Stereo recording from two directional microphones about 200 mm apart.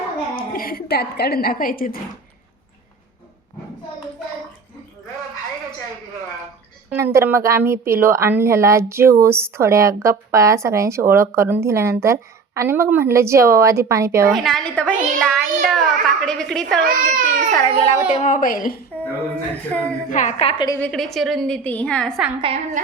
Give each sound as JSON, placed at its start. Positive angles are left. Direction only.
{"t": 0.3, "sound": "a woman's voice", "side_deg": 45}
{"t": 6.9, "sound": "a woman's voice", "side_deg": -15}
{"t": 14.3, "sound": "a child's voice", "side_deg": 0}
{"t": 16.8, "sound": "speech", "side_deg": -40}
{"t": 18.2, "sound": "a woman's voice", "side_deg": 40}
{"t": 18.9, "sound": "a woman's voice", "side_deg": 5}
{"t": 20.1, "sound": "a woman's voice", "side_deg": 40}
{"t": 20.7, "sound": "a child's voice", "side_deg": 10}
{"t": 22.4, "sound": "a woman's voice", "side_deg": -30}